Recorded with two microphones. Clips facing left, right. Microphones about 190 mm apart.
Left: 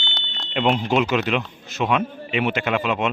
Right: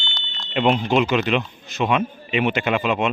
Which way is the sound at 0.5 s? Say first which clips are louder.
Right 1 dB; centre (ahead or behind).